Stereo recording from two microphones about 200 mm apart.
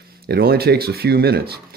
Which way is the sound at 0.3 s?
50° right (ahead or behind).